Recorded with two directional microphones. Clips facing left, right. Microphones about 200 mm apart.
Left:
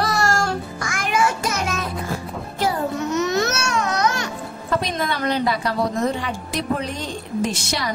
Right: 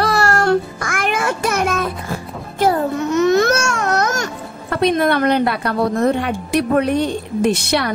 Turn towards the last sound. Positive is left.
turn(degrees=-60)  # may be behind; listen again after turning